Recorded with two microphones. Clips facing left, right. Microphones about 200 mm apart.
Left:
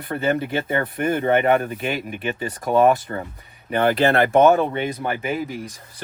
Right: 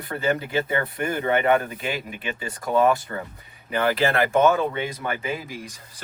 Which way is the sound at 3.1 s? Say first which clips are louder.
Left 3 dB; 35° left (ahead or behind).